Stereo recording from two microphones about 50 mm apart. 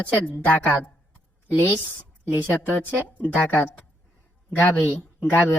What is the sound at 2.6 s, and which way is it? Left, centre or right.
Speech, left.